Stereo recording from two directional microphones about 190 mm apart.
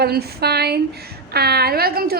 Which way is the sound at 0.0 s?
55° right (ahead or behind).